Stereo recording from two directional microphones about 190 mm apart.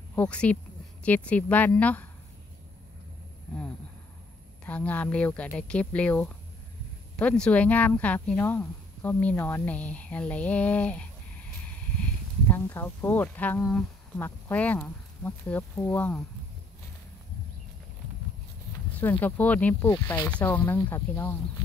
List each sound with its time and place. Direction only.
0.1 s speech: 5° left (ahead or behind)
4.6 s speech: 10° left (ahead or behind)
18.9 s speech: 10° left (ahead or behind)
19.9 s speech: 20° left (ahead or behind)
20.2 s speech: 10° left (ahead or behind)